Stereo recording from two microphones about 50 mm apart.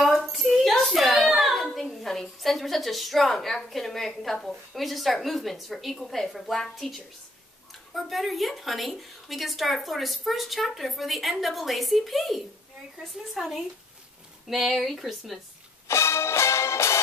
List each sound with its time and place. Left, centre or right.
0.0 s a woman's voice: centre
15.9 s music: left